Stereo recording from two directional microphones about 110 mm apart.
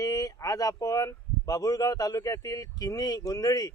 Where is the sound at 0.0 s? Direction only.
35° left (ahead or behind).